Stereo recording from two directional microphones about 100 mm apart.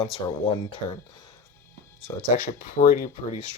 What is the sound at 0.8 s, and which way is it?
Speech, 75° left (ahead or behind).